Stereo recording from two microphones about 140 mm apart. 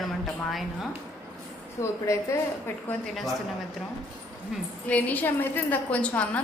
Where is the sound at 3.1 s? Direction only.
Centre (ahead or behind).